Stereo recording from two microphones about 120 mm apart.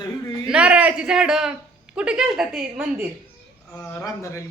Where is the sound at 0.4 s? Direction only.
10° right (ahead or behind).